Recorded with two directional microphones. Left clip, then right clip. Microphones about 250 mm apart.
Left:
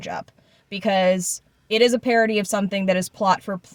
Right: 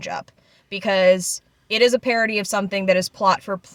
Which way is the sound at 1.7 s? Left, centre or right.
Centre.